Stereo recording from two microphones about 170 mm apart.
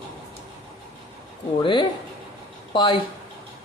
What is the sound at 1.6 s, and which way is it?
A man's voice, 30° left (ahead or behind).